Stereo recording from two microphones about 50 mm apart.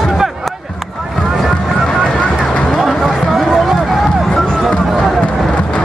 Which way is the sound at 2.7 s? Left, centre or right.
Centre.